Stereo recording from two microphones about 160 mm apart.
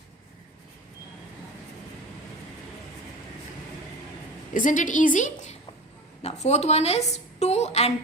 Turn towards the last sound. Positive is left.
turn(degrees=40)  # may be behind; listen again after turning